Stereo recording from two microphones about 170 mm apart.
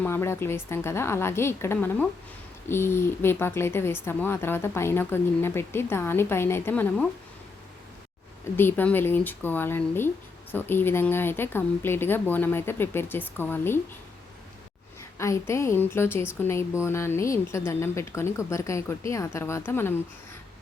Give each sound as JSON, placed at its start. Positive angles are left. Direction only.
{"t": 0.0, "sound": "speech", "side_deg": 15}
{"t": 8.5, "sound": "speech", "side_deg": 10}
{"t": 15.2, "sound": "speech", "side_deg": 15}